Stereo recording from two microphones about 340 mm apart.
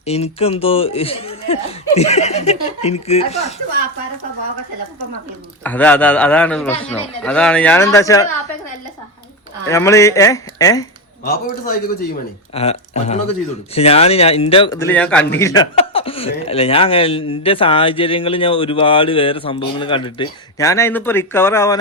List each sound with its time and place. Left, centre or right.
0.0 s speech: centre
5.6 s a man's voice: centre
9.6 s speech: centre
11.3 s speech: left; by 21.8 s centre